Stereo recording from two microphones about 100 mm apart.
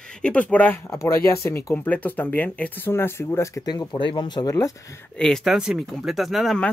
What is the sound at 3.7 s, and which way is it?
Speech, 50° left (ahead or behind).